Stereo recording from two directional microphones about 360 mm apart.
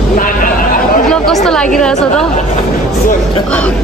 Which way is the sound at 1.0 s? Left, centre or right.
Centre.